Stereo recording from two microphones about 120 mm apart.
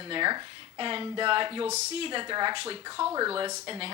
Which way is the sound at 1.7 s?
70° right (ahead or behind).